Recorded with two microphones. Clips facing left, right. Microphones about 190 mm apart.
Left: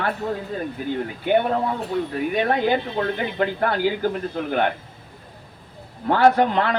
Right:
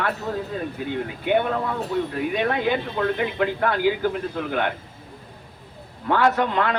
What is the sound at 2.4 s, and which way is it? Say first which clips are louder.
A man's voice: left 2 dB; 40° left (ahead or behind).